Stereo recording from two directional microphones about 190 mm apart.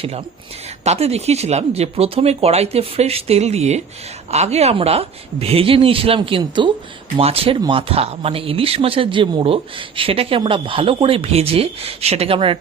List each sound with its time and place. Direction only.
0.9 s speech: 35° right (ahead or behind)